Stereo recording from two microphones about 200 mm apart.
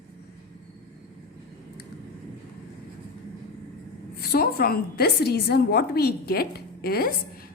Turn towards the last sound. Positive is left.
turn(degrees=50)  # may be behind; listen again after turning